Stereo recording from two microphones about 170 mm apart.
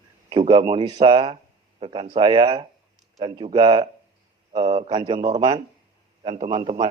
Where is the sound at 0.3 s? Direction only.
25° right (ahead or behind).